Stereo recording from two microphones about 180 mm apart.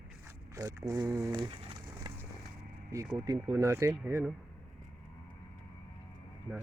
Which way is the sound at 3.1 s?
20° right (ahead or behind).